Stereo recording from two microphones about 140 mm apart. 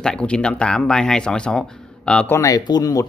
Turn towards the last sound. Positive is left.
turn(degrees=25)  # may be behind; listen again after turning